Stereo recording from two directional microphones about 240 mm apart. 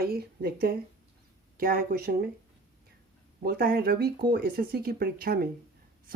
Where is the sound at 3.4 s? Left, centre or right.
Right.